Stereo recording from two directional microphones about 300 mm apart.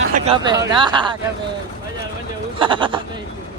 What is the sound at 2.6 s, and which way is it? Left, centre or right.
Speech, centre.